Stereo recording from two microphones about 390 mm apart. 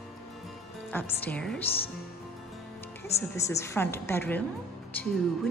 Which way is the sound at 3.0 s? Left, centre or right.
Centre.